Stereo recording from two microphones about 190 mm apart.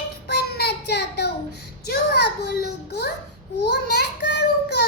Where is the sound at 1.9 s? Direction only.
55° left (ahead or behind).